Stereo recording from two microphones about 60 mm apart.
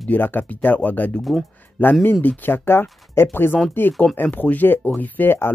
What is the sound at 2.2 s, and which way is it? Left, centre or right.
Speech, left.